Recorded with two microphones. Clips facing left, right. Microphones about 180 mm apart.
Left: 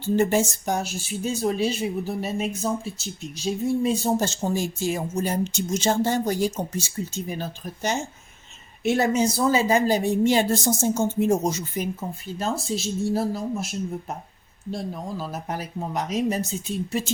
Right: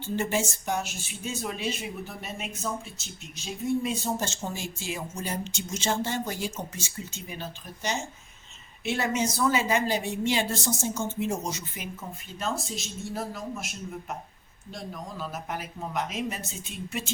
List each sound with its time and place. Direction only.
0.0 s speech: 40° left (ahead or behind)
12.4 s speech: 30° left (ahead or behind)
15.2 s speech: 35° left (ahead or behind)